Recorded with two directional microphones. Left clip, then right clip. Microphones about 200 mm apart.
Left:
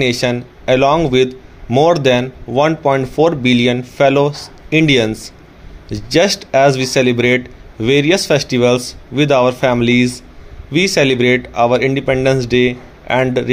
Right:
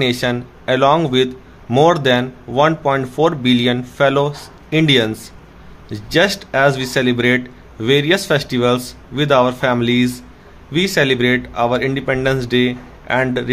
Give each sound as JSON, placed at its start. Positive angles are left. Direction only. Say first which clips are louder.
{"t": 0.0, "sound": "speech", "louder": "left 2 dB", "side_deg": 15}